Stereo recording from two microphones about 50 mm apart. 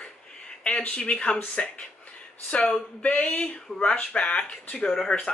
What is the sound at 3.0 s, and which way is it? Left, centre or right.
Speech, left.